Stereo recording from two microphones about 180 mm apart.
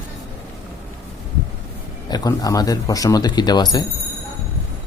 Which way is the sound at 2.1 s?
20° left (ahead or behind).